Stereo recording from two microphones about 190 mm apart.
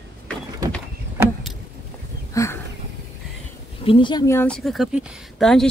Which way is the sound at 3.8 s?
25° left (ahead or behind).